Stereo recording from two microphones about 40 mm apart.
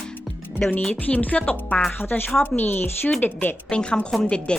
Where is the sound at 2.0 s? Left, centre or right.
Left.